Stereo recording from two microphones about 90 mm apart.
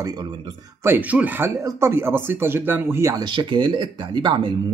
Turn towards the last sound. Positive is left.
turn(degrees=-60)  # may be behind; listen again after turning